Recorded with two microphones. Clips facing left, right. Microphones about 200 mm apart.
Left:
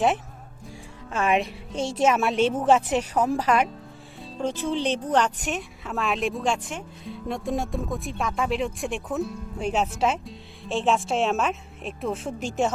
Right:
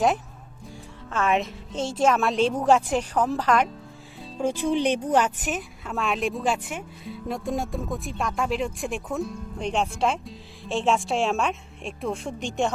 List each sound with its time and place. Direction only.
1.1 s a woman's voice: 15° left (ahead or behind)
1.7 s speech: 25° right (ahead or behind)
2.0 s a woman's voice: 5° left (ahead or behind)
4.2 s speech: 10° right (ahead or behind)